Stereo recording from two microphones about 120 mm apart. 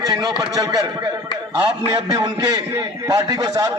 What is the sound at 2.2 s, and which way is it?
A man's voice, 30° right (ahead or behind).